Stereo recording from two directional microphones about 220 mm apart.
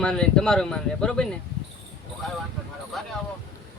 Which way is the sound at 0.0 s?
5° left (ahead or behind).